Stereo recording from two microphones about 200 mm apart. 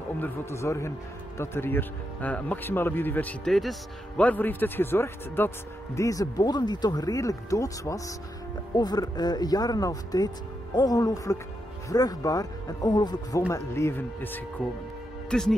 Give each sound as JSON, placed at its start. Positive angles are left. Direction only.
{"t": 0.2, "sound": "speech", "side_deg": 15}